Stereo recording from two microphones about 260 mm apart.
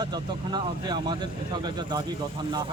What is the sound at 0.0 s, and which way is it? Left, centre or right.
Speech, centre.